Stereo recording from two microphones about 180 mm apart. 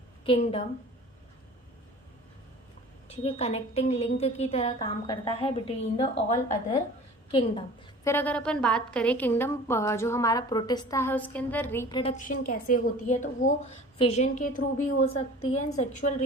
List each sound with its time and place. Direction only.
0.3 s a woman's voice: 35° left (ahead or behind)
3.1 s a woman's voice: 35° left (ahead or behind)
8.0 s a woman's voice: 10° left (ahead or behind)
11.9 s a woman's voice: 25° left (ahead or behind)
12.1 s a woman's voice: 50° left (ahead or behind)